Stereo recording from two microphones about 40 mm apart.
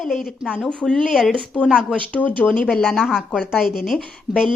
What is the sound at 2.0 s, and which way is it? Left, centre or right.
Speech, left.